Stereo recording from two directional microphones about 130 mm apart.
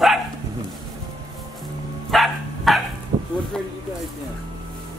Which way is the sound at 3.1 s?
45° right (ahead or behind).